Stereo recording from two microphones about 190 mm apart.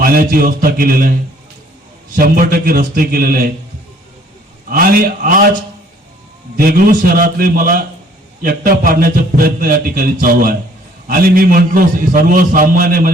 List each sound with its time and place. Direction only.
0.0 s a man's voice: 50° right (ahead or behind)
2.1 s a man's voice: 50° right (ahead or behind)
4.7 s a man's voice: 50° right (ahead or behind)
6.6 s a man's voice: 50° right (ahead or behind)